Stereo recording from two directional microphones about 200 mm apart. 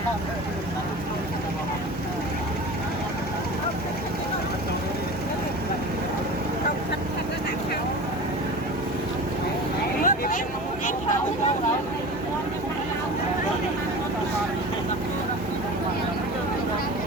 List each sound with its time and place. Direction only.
10.0 s vehicle: 45° left (ahead or behind)